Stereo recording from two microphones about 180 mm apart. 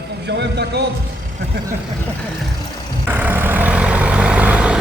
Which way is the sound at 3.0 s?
10° right (ahead or behind).